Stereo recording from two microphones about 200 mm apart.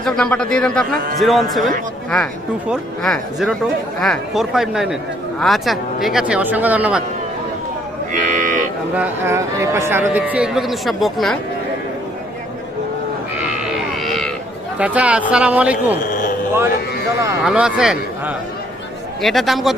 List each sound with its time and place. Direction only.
0.0 s speech: 5° left (ahead or behind)
8.1 s livestock: 40° right (ahead or behind)
9.0 s a man's voice: 15° right (ahead or behind)
13.9 s a sound: centre (ahead or behind)
14.8 s a man's voice: 5° right (ahead or behind)
16.0 s a sound: 40° left (ahead or behind)
17.1 s a man's voice: 15° right (ahead or behind)
17.4 s speech: 5° right (ahead or behind)